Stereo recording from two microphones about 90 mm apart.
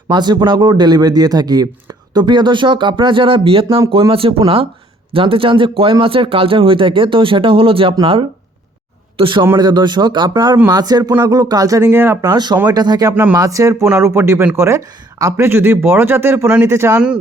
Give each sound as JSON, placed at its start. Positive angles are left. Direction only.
{"t": 0.1, "sound": "a man's voice", "side_deg": -55}
{"t": 9.1, "sound": "a man's voice", "side_deg": -70}
{"t": 9.6, "sound": "a man's voice", "side_deg": -55}
{"t": 11.9, "sound": "speech", "side_deg": -25}
{"t": 12.2, "sound": "speech", "side_deg": -45}